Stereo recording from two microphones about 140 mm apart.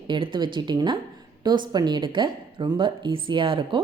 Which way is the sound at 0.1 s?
35° right (ahead or behind).